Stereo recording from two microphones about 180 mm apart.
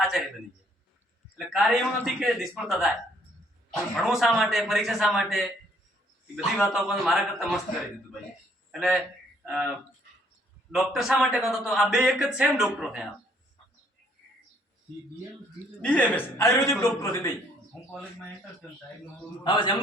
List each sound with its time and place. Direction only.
0.0 s a sound: centre (ahead or behind)
1.4 s a man's voice: centre (ahead or behind)
3.9 s a man's voice: centre (ahead or behind)
8.7 s speech: 5° right (ahead or behind)
10.7 s a man's voice: 5° right (ahead or behind)
15.8 s a man's voice: 5° left (ahead or behind)
19.5 s a man's voice: 30° left (ahead or behind)